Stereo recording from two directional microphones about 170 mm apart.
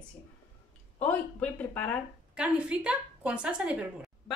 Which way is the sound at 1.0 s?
10° left (ahead or behind).